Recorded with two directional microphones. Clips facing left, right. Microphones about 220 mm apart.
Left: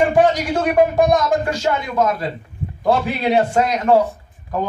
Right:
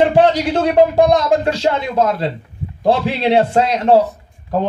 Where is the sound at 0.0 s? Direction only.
25° right (ahead or behind).